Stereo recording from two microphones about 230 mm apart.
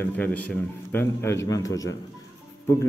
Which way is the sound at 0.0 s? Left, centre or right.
Centre.